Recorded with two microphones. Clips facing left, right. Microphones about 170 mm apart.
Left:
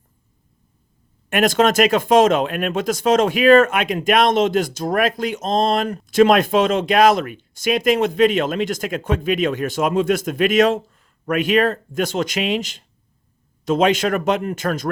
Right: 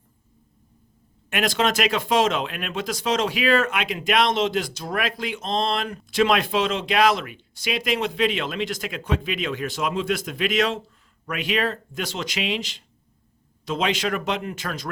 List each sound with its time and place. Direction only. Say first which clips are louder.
1.3 s speech: left 7 dB; 45° left (ahead or behind)